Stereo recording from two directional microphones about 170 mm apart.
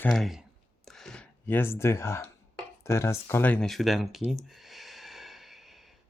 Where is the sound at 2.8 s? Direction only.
15° left (ahead or behind); by 4.3 s centre (ahead or behind).